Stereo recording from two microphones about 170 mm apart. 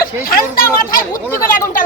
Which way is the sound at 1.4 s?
55° left (ahead or behind).